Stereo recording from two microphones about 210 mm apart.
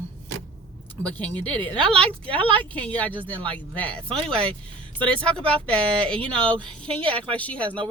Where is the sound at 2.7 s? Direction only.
5° left (ahead or behind).